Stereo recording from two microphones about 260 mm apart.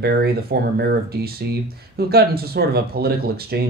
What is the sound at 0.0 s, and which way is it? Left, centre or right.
Speech, right.